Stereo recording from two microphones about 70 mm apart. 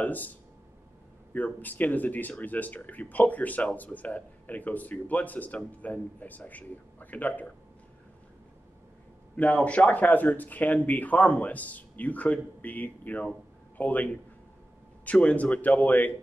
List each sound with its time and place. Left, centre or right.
0.0 s speech: left
9.4 s speech: centre